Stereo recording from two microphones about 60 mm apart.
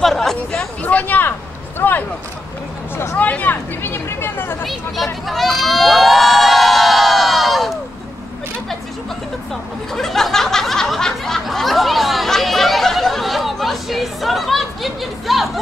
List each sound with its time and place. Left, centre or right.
0.0 s chatter: centre
0.8 s speech: left
3.2 s speech: left
3.8 s speech: left
4.6 s crowd: centre
9.9 s snicker: centre